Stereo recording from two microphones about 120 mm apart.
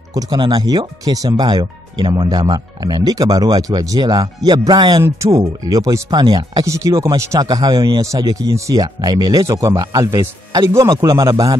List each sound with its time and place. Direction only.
0.1 s speech: 35° right (ahead or behind)
5.0 s speech: 25° right (ahead or behind)